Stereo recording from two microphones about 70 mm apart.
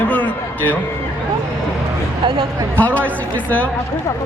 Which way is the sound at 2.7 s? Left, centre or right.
Left.